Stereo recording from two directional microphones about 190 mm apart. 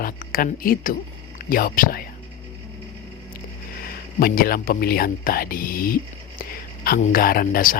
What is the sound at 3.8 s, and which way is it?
Speech, 50° left (ahead or behind).